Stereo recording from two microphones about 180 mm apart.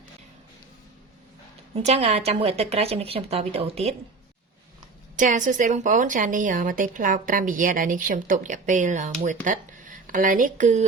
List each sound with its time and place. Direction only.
1.7 s a woman's voice: 35° right (ahead or behind)
5.1 s a woman's voice: 45° right (ahead or behind)